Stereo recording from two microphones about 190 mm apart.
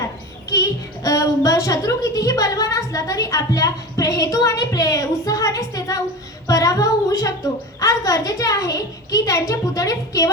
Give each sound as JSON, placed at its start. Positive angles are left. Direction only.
{"t": 0.5, "sound": "a woman's voice", "side_deg": 20}
{"t": 6.5, "sound": "a sound", "side_deg": 20}
{"t": 7.8, "sound": "a woman's voice", "side_deg": 15}